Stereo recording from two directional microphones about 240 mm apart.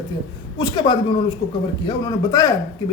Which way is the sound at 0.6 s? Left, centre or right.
Centre.